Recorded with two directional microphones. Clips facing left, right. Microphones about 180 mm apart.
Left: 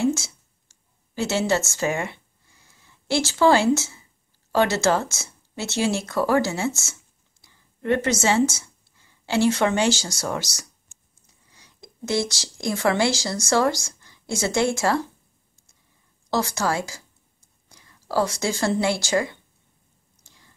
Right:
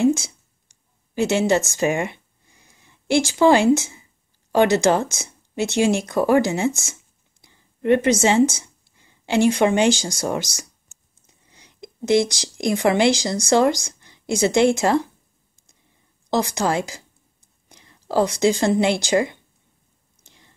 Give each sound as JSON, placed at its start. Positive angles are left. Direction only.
{"t": 0.0, "sound": "a sound", "side_deg": -15}
{"t": 4.5, "sound": "speech", "side_deg": -15}
{"t": 16.3, "sound": "a woman's voice", "side_deg": -20}
{"t": 20.2, "sound": "chewing", "side_deg": -20}